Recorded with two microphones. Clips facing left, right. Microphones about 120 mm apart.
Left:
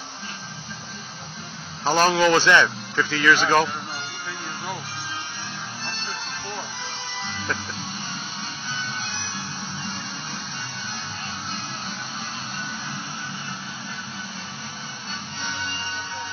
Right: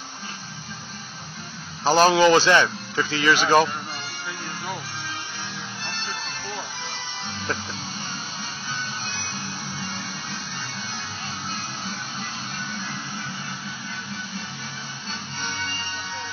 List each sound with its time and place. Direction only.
1.9 s speech: 20° right (ahead or behind)
3.2 s speech: 15° right (ahead or behind)